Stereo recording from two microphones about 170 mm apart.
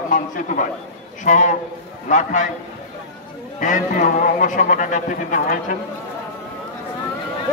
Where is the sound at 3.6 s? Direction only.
50° left (ahead or behind).